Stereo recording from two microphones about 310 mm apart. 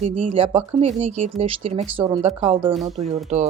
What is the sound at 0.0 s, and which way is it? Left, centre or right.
Speech, right.